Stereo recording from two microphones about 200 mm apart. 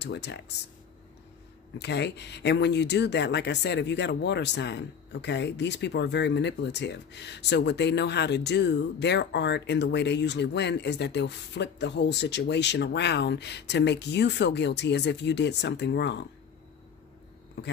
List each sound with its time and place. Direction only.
0.0 s speech: 60° left (ahead or behind)
1.8 s speech: 60° left (ahead or behind)